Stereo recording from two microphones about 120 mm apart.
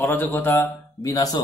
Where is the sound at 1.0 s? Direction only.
30° left (ahead or behind).